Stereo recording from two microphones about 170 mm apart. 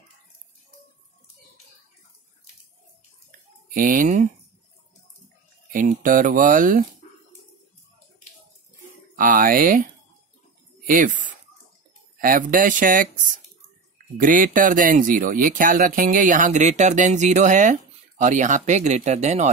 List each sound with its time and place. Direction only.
3.3 s a sound: 50° right (ahead or behind)
5.7 s speech: 55° right (ahead or behind)
9.1 s speech: 55° right (ahead or behind)
10.9 s speech: 50° right (ahead or behind)
14.1 s speech: 55° right (ahead or behind)